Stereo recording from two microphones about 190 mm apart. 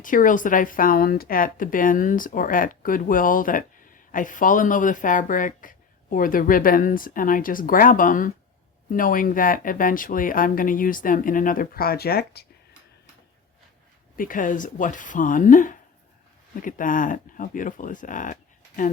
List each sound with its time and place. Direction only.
0.0 s speech: 45° left (ahead or behind)
14.2 s speech: 45° left (ahead or behind)